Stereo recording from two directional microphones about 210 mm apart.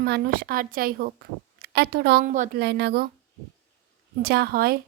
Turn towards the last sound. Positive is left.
turn(degrees=-45)  # may be behind; listen again after turning